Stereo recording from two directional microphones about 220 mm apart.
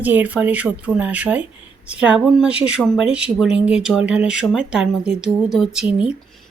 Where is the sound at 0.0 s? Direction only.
5° right (ahead or behind).